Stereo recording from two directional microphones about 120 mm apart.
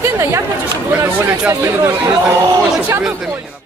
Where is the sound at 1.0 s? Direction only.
15° right (ahead or behind).